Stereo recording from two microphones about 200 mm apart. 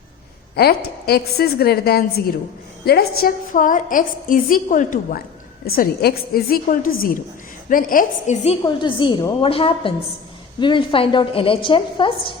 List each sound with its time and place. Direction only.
0.5 s a woman's voice: 50° left (ahead or behind)
8.4 s a woman's voice: 25° left (ahead or behind)